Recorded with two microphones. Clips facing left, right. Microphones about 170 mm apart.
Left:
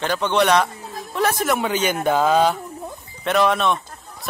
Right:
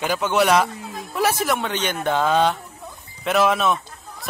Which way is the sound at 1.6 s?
10° left (ahead or behind).